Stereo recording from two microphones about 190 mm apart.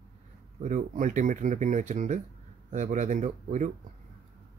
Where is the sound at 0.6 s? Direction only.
40° right (ahead or behind).